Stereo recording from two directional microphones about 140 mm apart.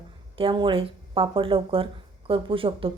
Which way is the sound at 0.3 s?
35° right (ahead or behind).